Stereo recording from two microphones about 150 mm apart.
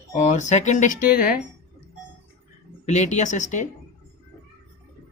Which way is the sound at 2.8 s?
50° left (ahead or behind).